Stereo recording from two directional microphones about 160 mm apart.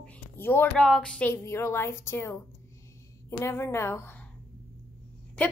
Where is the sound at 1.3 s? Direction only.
15° left (ahead or behind).